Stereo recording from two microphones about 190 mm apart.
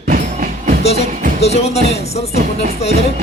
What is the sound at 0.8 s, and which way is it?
Music, 35° left (ahead or behind).